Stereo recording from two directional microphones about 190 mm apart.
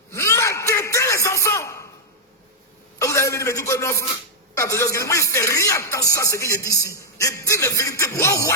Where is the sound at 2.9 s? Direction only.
15° left (ahead or behind).